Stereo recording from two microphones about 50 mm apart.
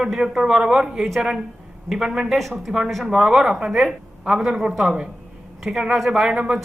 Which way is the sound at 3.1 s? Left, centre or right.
Centre.